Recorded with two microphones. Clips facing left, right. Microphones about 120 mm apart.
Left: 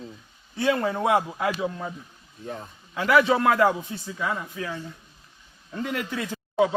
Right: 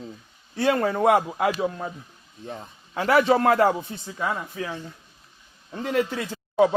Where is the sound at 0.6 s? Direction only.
50° right (ahead or behind).